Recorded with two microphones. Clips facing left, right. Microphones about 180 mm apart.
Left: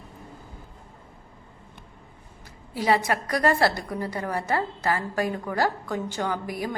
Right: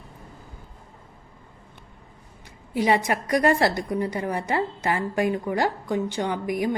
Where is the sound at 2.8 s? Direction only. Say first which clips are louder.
Right 1 dB; 20° right (ahead or behind).